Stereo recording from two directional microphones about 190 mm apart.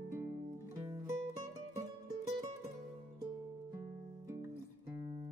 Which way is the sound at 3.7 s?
15° right (ahead or behind).